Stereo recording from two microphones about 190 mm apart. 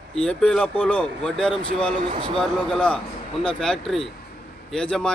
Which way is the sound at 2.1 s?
25° right (ahead or behind).